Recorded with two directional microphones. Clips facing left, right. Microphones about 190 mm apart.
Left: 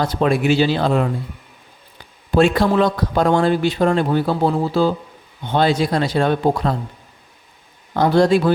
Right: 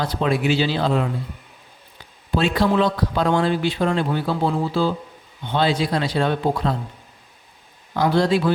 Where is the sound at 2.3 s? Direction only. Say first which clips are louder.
Left 4 dB; 50° left (ahead or behind).